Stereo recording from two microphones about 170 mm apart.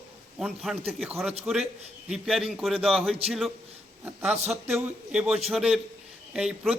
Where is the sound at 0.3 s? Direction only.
Centre (ahead or behind).